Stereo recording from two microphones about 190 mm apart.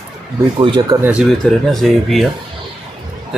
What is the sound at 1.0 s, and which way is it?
Speech, 5° right (ahead or behind).